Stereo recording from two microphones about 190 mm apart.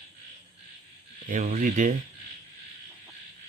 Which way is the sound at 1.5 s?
40° right (ahead or behind).